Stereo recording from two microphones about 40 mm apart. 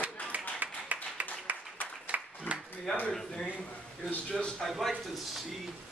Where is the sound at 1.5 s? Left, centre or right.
Right.